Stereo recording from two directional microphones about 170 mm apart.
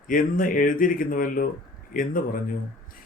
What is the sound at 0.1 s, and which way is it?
A man's voice, 55° left (ahead or behind).